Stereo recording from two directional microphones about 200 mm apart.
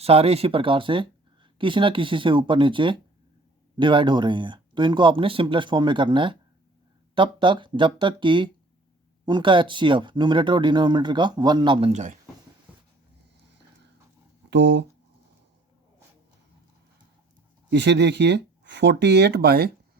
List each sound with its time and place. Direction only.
0.0 s speech: 30° right (ahead or behind)
14.5 s speech: 65° right (ahead or behind)
17.7 s speech: 60° right (ahead or behind)